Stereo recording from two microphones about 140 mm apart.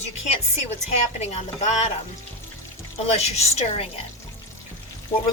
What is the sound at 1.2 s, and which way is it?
Speech, 50° left (ahead or behind).